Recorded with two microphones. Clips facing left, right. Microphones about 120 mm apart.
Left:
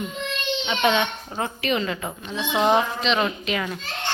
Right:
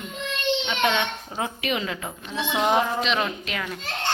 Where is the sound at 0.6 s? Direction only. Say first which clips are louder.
Left 7 dB; 5° left (ahead or behind).